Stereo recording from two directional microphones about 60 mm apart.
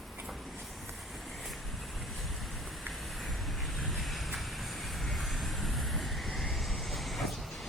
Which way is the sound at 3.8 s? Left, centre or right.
Centre.